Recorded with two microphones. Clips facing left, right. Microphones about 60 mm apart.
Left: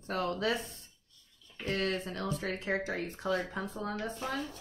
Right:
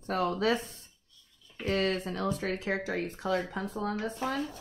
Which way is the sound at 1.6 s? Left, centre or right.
Right.